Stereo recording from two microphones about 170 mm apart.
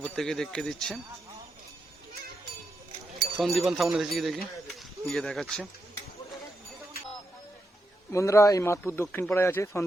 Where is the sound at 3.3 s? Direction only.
Centre (ahead or behind).